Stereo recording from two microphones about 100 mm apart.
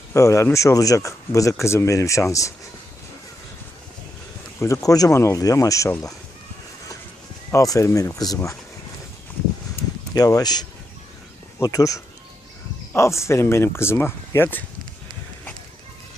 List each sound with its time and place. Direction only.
0.1 s speech: 30° left (ahead or behind)
4.6 s speech: 35° left (ahead or behind)
7.5 s speech: 35° left (ahead or behind)
10.2 s speech: 40° left (ahead or behind); by 14.6 s 20° left (ahead or behind)